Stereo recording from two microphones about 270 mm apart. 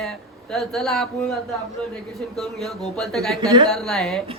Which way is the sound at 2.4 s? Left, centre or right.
Centre.